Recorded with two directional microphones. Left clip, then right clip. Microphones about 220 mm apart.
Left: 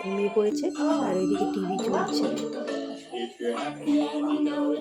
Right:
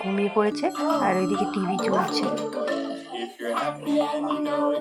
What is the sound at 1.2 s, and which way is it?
Music, 40° right (ahead or behind).